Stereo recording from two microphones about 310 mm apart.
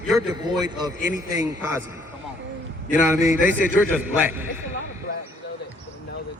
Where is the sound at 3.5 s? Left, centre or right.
Left.